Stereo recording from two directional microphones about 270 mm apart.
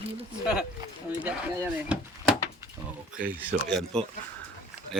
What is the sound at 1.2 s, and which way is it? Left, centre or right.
A man's voice, centre.